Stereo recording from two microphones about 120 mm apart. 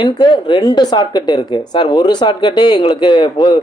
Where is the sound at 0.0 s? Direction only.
40° left (ahead or behind).